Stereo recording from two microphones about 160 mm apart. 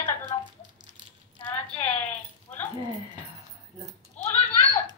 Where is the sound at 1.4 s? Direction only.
10° left (ahead or behind).